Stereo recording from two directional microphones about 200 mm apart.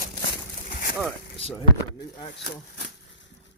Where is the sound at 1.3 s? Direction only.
30° left (ahead or behind).